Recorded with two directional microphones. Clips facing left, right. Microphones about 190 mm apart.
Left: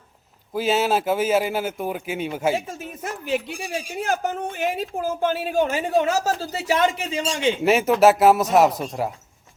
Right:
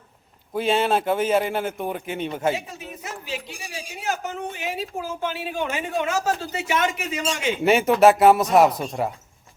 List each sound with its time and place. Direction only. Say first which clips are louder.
0.5 s a man's voice: even; 5° left (ahead or behind)
2.6 s speech: left 4 dB; 50° left (ahead or behind); by 7.5 s 30° left (ahead or behind)
7.6 s a man's voice: right 1 dB; centre (ahead or behind)